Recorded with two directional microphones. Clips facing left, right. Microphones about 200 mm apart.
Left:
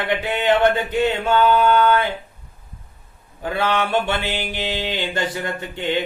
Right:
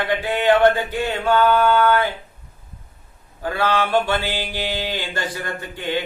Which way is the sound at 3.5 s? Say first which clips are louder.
Right 1 dB; 20° left (ahead or behind).